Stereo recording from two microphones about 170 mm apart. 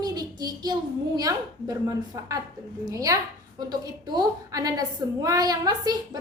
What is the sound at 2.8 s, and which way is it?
A woman's voice, 20° right (ahead or behind).